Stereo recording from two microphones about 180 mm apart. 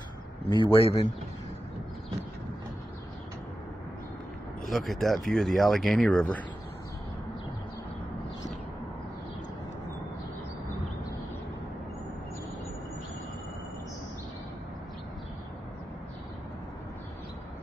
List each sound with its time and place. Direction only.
0.7 s speech: 30° left (ahead or behind)
4.6 s speech: centre (ahead or behind)